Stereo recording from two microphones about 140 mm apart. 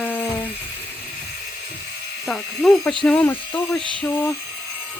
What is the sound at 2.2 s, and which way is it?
Speech, 5° left (ahead or behind).